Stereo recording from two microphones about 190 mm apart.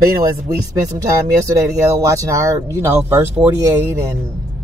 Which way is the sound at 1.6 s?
15° right (ahead or behind).